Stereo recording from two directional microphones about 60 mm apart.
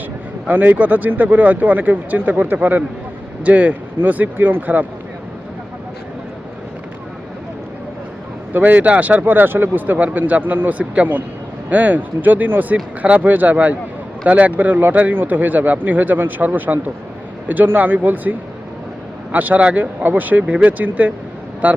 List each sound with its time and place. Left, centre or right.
0.4 s speech: right
8.5 s speech: right